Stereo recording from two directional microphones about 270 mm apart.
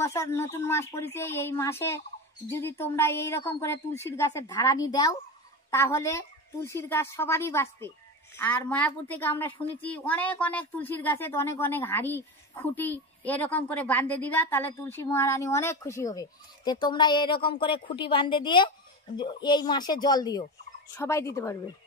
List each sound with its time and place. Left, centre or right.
0.0 s a woman's voice: centre